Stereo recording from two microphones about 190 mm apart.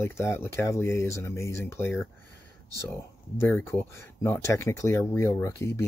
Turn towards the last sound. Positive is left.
turn(degrees=15)  # may be behind; listen again after turning